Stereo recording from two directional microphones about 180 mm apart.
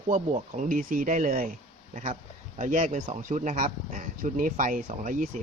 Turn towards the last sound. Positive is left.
turn(degrees=-45)  # may be behind; listen again after turning